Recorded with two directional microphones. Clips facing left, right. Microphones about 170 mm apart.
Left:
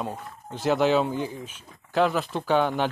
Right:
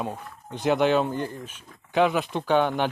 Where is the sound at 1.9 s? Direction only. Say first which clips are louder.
Right 1 dB; centre (ahead or behind).